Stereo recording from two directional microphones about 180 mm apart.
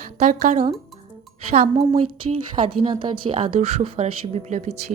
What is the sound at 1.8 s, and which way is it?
Speech, 30° right (ahead or behind).